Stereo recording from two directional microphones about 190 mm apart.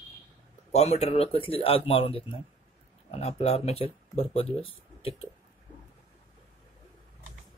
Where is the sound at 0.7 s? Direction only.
35° left (ahead or behind).